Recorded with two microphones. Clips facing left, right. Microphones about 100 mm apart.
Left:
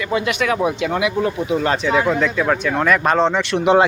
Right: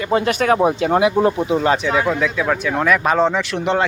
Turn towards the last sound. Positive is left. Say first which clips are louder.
# left 5 dB
turn(degrees=10)  # may be behind; listen again after turning